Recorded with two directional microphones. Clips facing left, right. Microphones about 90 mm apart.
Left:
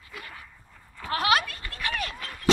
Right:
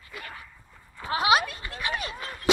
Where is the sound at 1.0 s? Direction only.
20° right (ahead or behind).